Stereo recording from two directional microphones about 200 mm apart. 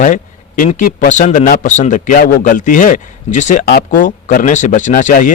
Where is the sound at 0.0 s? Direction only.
40° left (ahead or behind).